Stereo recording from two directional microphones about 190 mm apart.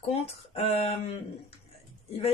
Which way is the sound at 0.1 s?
30° left (ahead or behind).